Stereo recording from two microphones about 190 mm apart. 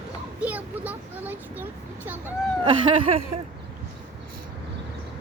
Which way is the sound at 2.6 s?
25° right (ahead or behind).